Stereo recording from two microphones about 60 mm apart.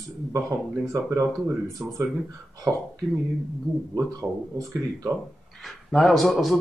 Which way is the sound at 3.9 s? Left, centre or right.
Right.